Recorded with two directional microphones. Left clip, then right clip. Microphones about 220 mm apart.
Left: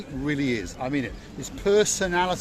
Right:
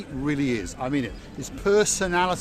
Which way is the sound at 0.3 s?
5° right (ahead or behind).